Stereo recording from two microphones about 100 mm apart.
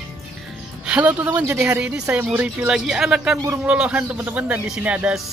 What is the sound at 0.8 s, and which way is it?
Speech, 15° right (ahead or behind).